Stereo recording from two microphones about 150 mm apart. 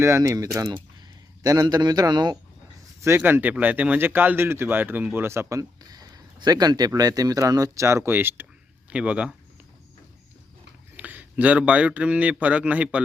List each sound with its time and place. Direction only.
0.0 s a man's voice: 20° right (ahead or behind)
3.0 s speech: 15° right (ahead or behind)
10.9 s a man's voice: 10° right (ahead or behind)